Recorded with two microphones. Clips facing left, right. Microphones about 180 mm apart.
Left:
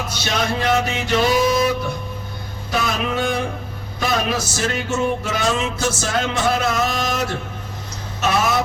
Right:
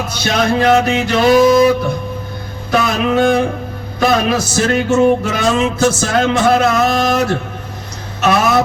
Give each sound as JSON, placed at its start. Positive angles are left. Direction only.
{"t": 0.3, "sound": "music", "side_deg": -70}
{"t": 2.7, "sound": "a sound", "side_deg": -85}
{"t": 4.0, "sound": "music", "side_deg": -75}